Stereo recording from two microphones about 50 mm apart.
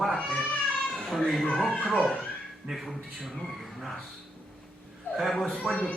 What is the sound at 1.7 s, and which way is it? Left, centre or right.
Speech, left.